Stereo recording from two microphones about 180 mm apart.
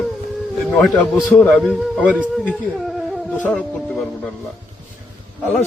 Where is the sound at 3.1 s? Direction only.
5° left (ahead or behind).